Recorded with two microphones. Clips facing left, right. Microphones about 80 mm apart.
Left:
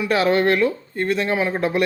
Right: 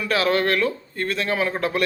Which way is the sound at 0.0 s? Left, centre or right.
Centre.